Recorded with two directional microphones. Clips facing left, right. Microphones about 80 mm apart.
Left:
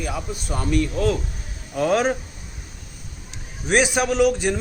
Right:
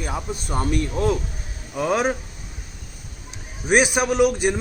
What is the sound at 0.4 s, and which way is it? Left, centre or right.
Speech, right.